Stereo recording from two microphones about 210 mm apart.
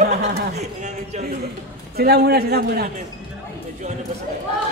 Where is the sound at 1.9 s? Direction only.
50° right (ahead or behind).